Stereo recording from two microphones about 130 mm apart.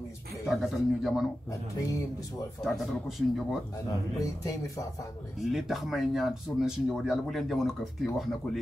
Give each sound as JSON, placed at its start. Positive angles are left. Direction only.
{"t": 0.5, "sound": "speech", "side_deg": 0}
{"t": 2.6, "sound": "speech", "side_deg": 0}
{"t": 4.2, "sound": "speech", "side_deg": 25}
{"t": 5.4, "sound": "speech", "side_deg": 0}